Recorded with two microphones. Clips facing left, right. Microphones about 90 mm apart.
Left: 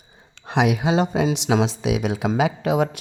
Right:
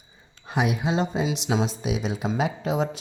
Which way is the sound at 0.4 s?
90° left.